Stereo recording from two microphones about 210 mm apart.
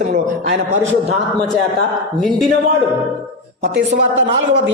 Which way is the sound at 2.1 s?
Centre (ahead or behind).